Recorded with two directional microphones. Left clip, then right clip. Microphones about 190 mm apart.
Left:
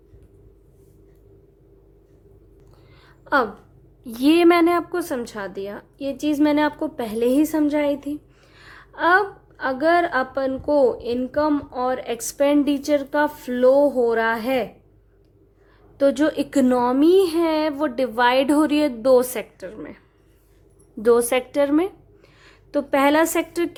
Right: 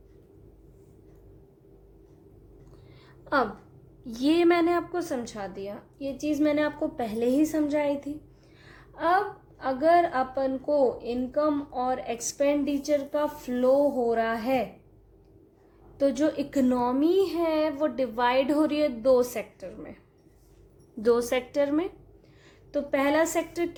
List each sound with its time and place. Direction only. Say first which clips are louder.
3.3 s a woman's voice: left 6 dB; 25° left (ahead or behind); by 14.7 s 50° left (ahead or behind)
16.0 s a woman's voice: left 6 dB; 50° left (ahead or behind)
21.0 s a woman's voice: left 7 dB; 30° left (ahead or behind)